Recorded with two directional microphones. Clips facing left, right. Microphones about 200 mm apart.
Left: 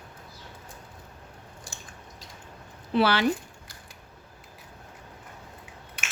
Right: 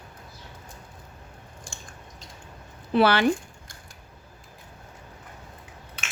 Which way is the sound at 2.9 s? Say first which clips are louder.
Right 3 dB; 55° right (ahead or behind).